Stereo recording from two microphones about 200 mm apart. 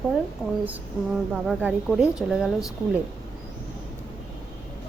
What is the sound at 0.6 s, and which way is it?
A woman's voice, 5° right (ahead or behind).